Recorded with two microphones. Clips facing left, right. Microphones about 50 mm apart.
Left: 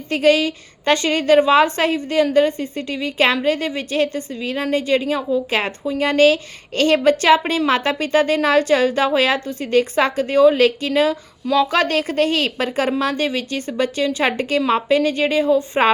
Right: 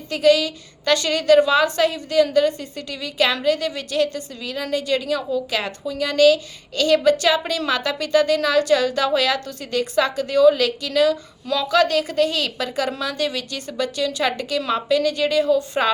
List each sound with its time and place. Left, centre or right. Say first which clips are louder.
0.1 s a woman's voice: left 1 dB; left
5.5 s a woman's voice: left 4 dB; left